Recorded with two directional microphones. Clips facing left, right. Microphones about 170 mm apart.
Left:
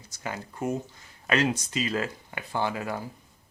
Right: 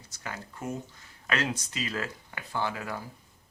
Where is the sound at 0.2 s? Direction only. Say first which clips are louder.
Left 6 dB; 20° left (ahead or behind).